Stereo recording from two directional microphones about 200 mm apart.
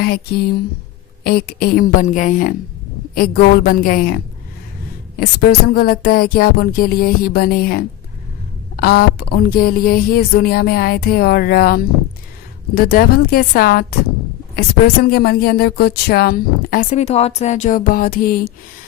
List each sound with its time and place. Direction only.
0.0 s a woman's voice: 50° left (ahead or behind)